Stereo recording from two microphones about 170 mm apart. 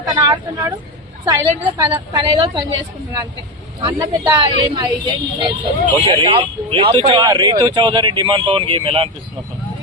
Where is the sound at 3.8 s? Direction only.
25° right (ahead or behind).